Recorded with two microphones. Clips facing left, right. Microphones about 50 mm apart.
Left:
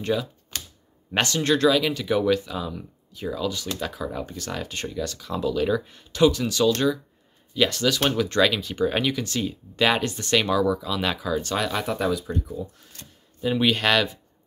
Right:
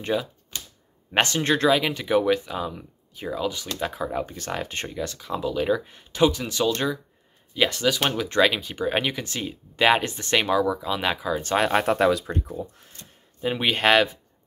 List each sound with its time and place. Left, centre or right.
0.0 s speech: right
0.5 s typewriter: left
1.1 s speech: right
11.5 s speech: right
12.3 s speech: right
13.4 s speech: right